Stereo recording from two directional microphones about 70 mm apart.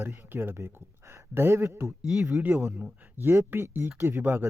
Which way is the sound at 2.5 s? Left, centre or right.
Right.